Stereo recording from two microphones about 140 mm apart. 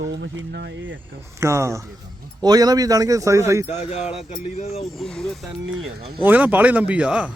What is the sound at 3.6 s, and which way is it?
Speech, 55° left (ahead or behind).